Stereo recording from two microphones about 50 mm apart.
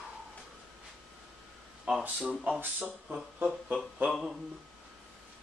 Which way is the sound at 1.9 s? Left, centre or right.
Centre.